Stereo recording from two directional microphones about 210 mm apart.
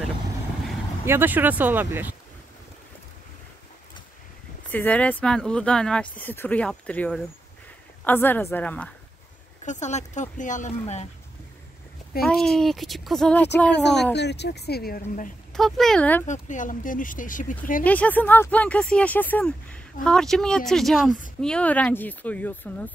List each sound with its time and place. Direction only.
1.0 s speech: 10° right (ahead or behind)
4.6 s speech: 10° left (ahead or behind)
9.7 s speech: 35° left (ahead or behind)
12.3 s speech: centre (ahead or behind)
14.1 s speech: 55° left (ahead or behind); by 15.3 s 40° left (ahead or behind)
15.5 s speech: centre (ahead or behind)
16.3 s speech: 35° left (ahead or behind)
17.8 s speech: 5° left (ahead or behind)